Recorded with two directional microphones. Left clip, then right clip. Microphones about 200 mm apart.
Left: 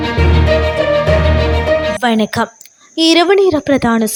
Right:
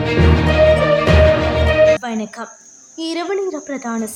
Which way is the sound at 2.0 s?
45° left (ahead or behind).